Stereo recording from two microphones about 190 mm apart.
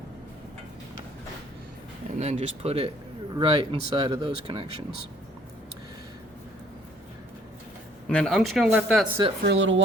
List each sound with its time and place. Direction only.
2.1 s speech: 35° right (ahead or behind)
8.0 s speech: centre (ahead or behind)
9.4 s speech: 70° right (ahead or behind)